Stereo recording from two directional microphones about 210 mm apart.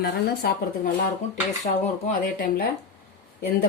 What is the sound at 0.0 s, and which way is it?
Speech, 50° left (ahead or behind).